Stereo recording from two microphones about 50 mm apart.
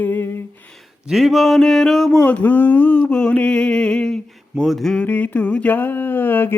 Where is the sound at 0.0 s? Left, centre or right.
Left.